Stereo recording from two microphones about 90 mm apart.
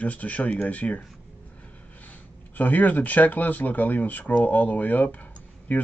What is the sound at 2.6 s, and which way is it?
Speech, 20° left (ahead or behind).